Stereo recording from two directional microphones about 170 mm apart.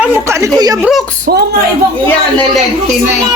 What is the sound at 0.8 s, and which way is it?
Speech, centre (ahead or behind).